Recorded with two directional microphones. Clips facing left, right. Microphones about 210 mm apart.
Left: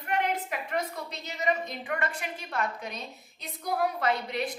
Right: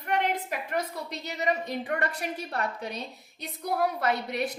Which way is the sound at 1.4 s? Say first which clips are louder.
Right 1 dB; 35° right (ahead or behind).